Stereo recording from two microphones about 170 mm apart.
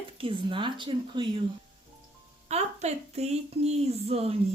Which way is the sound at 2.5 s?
40° right (ahead or behind).